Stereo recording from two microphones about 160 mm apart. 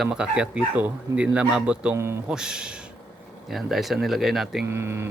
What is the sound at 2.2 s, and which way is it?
Speech, 5° right (ahead or behind).